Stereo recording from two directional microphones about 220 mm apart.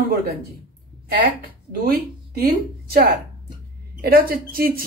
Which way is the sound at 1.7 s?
45° right (ahead or behind).